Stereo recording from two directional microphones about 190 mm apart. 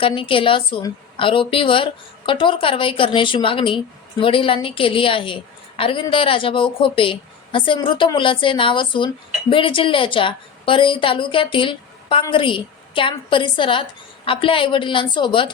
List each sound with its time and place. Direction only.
0.0 s a woman's voice: 30° left (ahead or behind)